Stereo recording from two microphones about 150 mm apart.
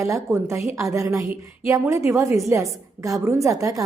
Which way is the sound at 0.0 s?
20° right (ahead or behind).